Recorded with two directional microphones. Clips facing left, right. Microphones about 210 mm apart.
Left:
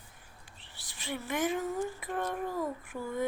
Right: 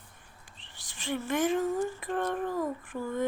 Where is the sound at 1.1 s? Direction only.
5° left (ahead or behind).